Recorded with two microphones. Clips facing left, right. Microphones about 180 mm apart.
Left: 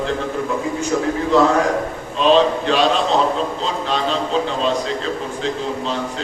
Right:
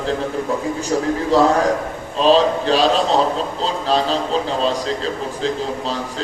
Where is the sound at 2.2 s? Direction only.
35° right (ahead or behind).